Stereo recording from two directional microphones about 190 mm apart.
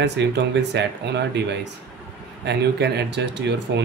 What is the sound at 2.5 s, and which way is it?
Speech, 60° right (ahead or behind).